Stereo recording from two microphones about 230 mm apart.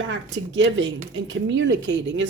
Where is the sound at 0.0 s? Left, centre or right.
Right.